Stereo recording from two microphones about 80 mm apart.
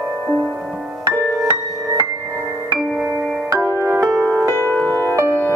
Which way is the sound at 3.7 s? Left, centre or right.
Right.